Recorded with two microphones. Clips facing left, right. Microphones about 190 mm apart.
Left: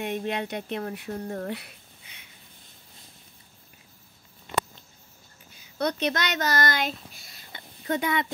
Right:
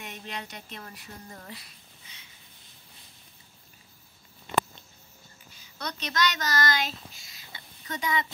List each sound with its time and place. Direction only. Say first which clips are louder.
0.0 s speech: left 11 dB; 55° left (ahead or behind)
5.8 s speech: left 5 dB; 55° left (ahead or behind)